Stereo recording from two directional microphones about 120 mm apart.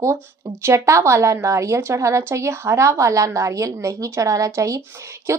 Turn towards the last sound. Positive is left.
turn(degrees=-25)  # may be behind; listen again after turning